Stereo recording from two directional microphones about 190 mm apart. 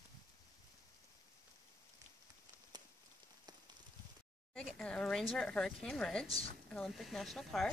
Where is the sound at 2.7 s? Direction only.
20° right (ahead or behind).